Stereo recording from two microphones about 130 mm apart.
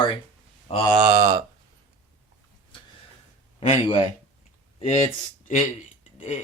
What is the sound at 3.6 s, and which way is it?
Speech, 55° left (ahead or behind).